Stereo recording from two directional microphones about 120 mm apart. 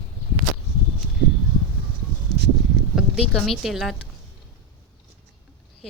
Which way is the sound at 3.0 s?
Centre (ahead or behind).